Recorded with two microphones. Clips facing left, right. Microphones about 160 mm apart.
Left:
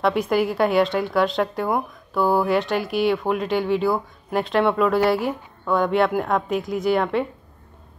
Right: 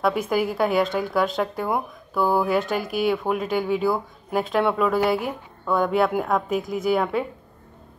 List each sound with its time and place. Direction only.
0.0 s speech: centre (ahead or behind)